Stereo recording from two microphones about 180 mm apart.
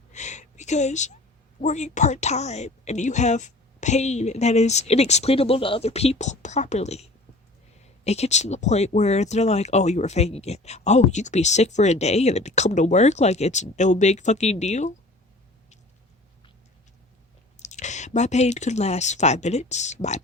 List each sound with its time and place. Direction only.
0.1 s a sound: 40° left (ahead or behind)
1.6 s speech: 40° left (ahead or behind)
17.6 s speech: 40° left (ahead or behind)